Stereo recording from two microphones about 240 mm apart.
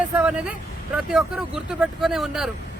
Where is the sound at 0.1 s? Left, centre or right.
Centre.